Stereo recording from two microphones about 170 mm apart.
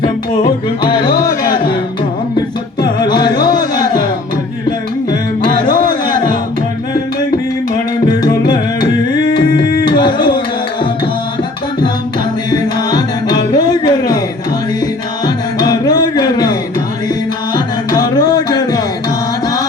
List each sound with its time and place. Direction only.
0.0 s music: 30° left (ahead or behind)
2.8 s music: 25° left (ahead or behind)
8.0 s music: 25° left (ahead or behind)
9.8 s a sound: 25° left (ahead or behind)
12.5 s music: 25° left (ahead or behind)
15.5 s music: 25° left (ahead or behind)